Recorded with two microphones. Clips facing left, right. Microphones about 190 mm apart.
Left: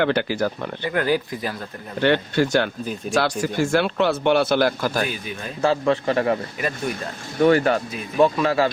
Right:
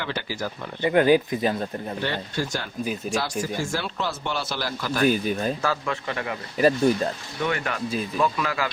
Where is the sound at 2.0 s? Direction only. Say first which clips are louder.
Left 11 dB; 70° left (ahead or behind); by 5.0 s 45° left (ahead or behind).